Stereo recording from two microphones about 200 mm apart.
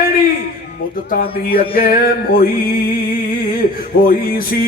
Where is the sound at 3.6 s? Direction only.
45° left (ahead or behind).